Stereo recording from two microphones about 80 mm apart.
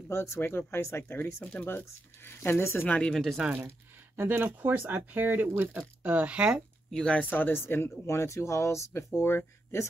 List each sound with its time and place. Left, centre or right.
0.1 s speech: left
3.0 s speech: centre
3.3 s speech: centre
4.2 s speech: right
6.9 s speech: centre
7.3 s speech: left